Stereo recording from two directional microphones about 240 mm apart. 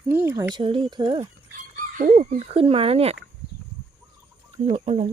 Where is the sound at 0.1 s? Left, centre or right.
Centre.